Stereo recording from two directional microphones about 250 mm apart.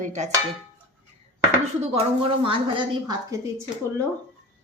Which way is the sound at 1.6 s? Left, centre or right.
Right.